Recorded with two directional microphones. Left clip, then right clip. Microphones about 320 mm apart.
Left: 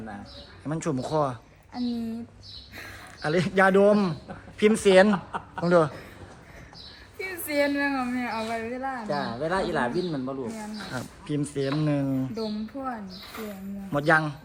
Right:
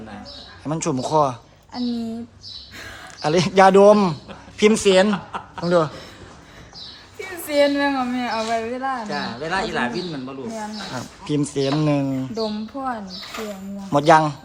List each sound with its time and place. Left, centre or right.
0.6 s speech: centre
5.1 s chuckle: left
5.6 s speech: centre
7.4 s speech: centre
9.0 s speech: centre
10.6 s speech: centre